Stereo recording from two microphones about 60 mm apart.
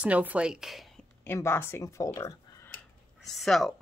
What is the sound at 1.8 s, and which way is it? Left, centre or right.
Speech, left.